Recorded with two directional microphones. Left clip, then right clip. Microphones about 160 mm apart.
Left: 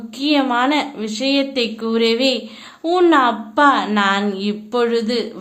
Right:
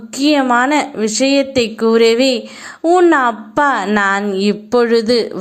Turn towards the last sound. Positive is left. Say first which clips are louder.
# right 6 dB
turn(degrees=-45)  # may be behind; listen again after turning